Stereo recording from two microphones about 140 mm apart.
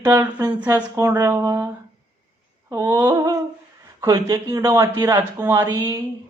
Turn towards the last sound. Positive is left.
turn(degrees=-25)  # may be behind; listen again after turning